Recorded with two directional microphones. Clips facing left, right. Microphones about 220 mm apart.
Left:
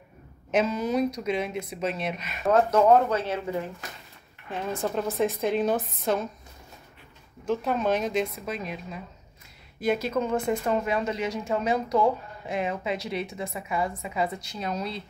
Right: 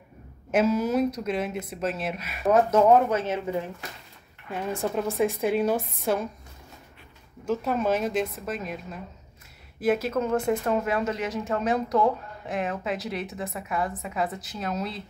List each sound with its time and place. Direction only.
0.5 s speech: 5° right (ahead or behind)
2.5 s speech: 20° right (ahead or behind)
4.5 s a woman's voice: 5° right (ahead or behind)
7.4 s speech: 5° right (ahead or behind)